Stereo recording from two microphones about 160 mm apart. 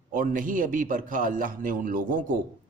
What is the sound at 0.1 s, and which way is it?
A man's voice, 60° right (ahead or behind).